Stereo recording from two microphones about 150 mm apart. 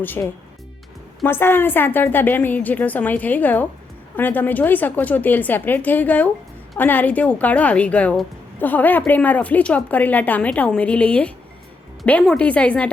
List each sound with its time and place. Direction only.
0.0 s a woman's voice: 15° left (ahead or behind)